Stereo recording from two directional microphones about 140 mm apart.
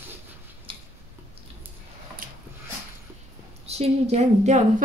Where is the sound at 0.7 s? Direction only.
40° right (ahead or behind).